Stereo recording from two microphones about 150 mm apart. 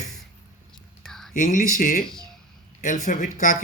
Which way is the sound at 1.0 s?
5° left (ahead or behind).